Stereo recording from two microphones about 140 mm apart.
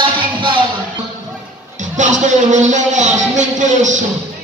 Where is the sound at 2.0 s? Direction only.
60° right (ahead or behind).